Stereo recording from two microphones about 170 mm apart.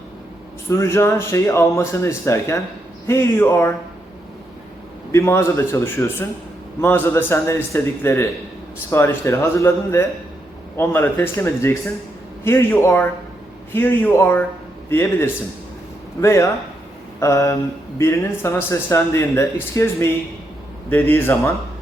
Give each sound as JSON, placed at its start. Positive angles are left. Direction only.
{"t": 0.7, "sound": "speech", "side_deg": 15}
{"t": 5.1, "sound": "a man's voice", "side_deg": 15}